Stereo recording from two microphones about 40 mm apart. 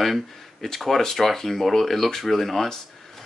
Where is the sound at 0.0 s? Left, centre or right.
Centre.